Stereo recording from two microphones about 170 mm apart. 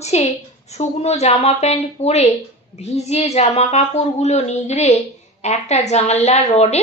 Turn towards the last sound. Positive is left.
turn(degrees=40)  # may be behind; listen again after turning